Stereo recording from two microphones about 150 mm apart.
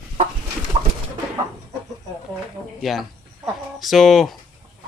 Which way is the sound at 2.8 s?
Centre (ahead or behind).